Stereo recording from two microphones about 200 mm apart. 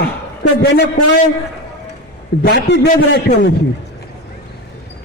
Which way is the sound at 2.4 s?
55° left (ahead or behind).